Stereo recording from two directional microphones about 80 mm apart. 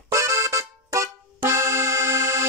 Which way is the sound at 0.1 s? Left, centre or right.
Right.